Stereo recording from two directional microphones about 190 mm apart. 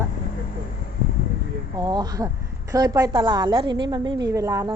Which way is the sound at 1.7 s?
20° right (ahead or behind).